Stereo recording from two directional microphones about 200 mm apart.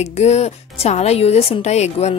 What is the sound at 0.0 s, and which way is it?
A woman's voice, 35° left (ahead or behind).